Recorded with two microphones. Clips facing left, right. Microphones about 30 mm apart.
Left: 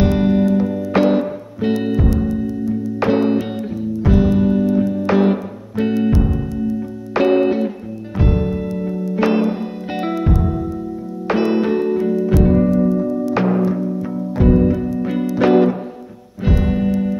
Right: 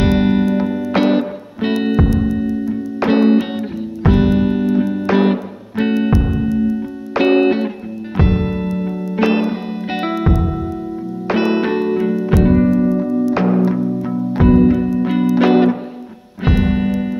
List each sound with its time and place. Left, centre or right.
0.0 s music: right
11.3 s music: right
13.4 s music: centre
14.3 s music: right
16.4 s music: right